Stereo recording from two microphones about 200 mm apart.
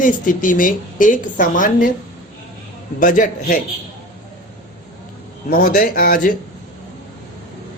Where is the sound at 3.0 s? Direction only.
40° left (ahead or behind).